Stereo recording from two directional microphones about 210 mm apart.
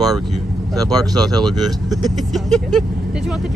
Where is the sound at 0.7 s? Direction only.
15° right (ahead or behind).